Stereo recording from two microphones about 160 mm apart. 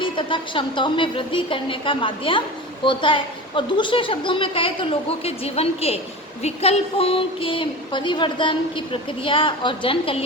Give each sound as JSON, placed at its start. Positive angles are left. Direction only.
{"t": 0.0, "sound": "a woman's voice", "side_deg": 30}